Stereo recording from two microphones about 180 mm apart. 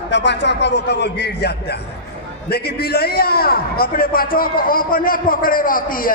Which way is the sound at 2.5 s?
60° left (ahead or behind).